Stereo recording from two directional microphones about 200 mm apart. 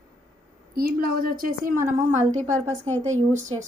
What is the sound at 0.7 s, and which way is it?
Speech, 45° right (ahead or behind).